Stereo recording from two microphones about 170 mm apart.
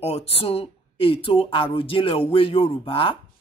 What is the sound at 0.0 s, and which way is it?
Speech, 35° left (ahead or behind).